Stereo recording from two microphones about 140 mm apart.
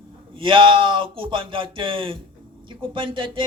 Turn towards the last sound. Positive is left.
turn(degrees=-40)  # may be behind; listen again after turning